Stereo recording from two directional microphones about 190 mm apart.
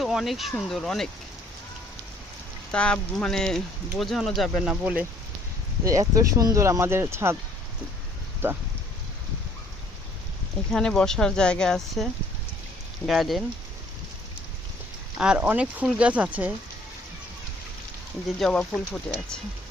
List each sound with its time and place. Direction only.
0.0 s speech: centre (ahead or behind)
2.7 s speech: 5° left (ahead or behind); by 7.3 s 15° right (ahead or behind)
8.4 s speech: 10° right (ahead or behind)
10.7 s speech: 5° left (ahead or behind)
13.1 s speech: centre (ahead or behind)
15.2 s speech: 5° right (ahead or behind)
18.3 s speech: centre (ahead or behind)